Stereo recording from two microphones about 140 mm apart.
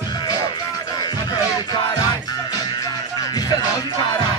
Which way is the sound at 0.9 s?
30° left (ahead or behind).